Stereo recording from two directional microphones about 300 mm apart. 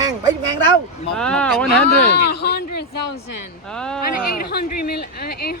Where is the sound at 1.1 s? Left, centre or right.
Centre.